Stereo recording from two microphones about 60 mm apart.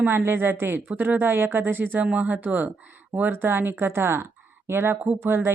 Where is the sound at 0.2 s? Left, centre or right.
Right.